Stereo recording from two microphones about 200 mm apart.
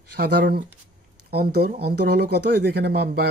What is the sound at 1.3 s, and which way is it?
Speech, 50° right (ahead or behind).